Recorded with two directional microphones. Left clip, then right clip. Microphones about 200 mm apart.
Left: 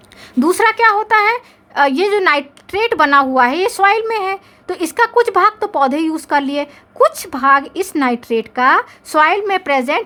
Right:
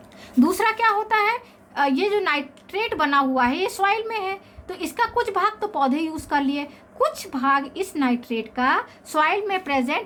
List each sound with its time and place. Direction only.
0.3 s a woman's voice: 50° left (ahead or behind)